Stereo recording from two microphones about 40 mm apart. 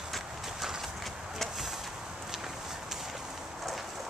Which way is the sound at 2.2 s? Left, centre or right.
Centre.